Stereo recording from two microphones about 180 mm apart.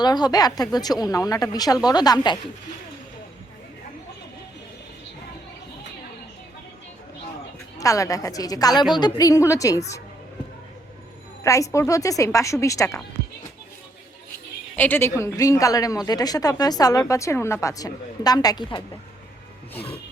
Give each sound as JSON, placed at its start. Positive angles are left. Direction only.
{"t": 0.0, "sound": "speech", "side_deg": 20}
{"t": 7.8, "sound": "speech", "side_deg": 20}
{"t": 11.4, "sound": "a woman's voice", "side_deg": 15}
{"t": 14.8, "sound": "speech", "side_deg": 10}